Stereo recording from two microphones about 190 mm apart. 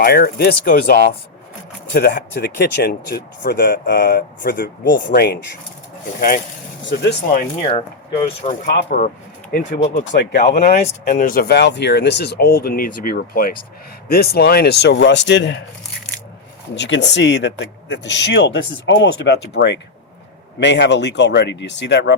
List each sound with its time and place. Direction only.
0.0 s speech: 55° left (ahead or behind)
5.0 s speech: 60° left (ahead or behind)
7.6 s speech: 30° left (ahead or behind)
8.6 s speech: 55° left (ahead or behind)
16.7 s speech: 70° left (ahead or behind)